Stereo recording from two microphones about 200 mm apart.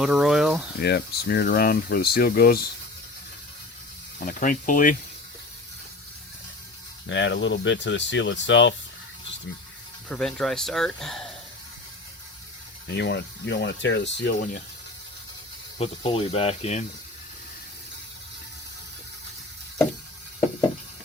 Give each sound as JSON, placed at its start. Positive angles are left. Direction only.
{"t": 0.0, "sound": "speech", "side_deg": -5}
{"t": 0.8, "sound": "speech", "side_deg": 55}
{"t": 4.2, "sound": "speech", "side_deg": 40}
{"t": 7.1, "sound": "speech", "side_deg": 65}
{"t": 10.1, "sound": "speech", "side_deg": 5}
{"t": 12.9, "sound": "speech", "side_deg": 60}
{"t": 15.8, "sound": "speech", "side_deg": 30}